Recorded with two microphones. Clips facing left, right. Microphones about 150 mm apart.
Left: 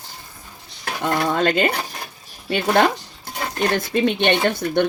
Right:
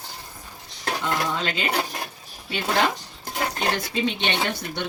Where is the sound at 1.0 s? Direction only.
55° left (ahead or behind).